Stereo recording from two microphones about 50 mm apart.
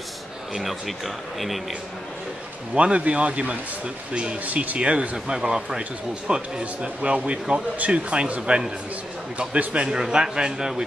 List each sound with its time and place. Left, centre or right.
0.6 s speech: centre
2.7 s speech: right
9.8 s a man's voice: centre